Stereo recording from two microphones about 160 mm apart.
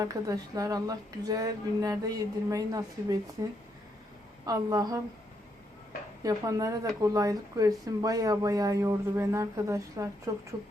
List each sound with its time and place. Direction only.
0.0 s speech: 20° right (ahead or behind)
6.2 s speech: 20° right (ahead or behind)